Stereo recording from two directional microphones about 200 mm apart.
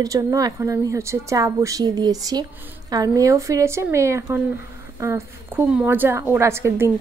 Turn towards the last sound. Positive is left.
turn(degrees=-15)  # may be behind; listen again after turning